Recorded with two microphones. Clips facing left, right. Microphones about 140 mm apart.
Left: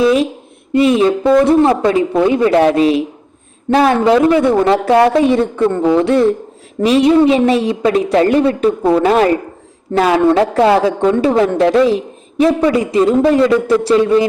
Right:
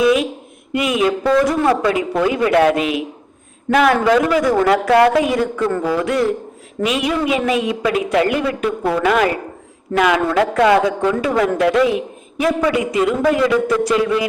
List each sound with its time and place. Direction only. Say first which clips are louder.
0.0 s speech: left 3 dB; 30° left (ahead or behind)
1.2 s a woman's voice: left 6 dB; 20° left (ahead or behind)